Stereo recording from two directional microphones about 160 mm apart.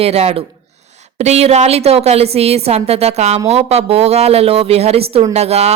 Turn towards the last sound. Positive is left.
turn(degrees=-40)  # may be behind; listen again after turning